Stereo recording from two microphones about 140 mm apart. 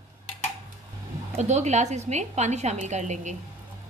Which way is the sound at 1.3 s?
55° right (ahead or behind).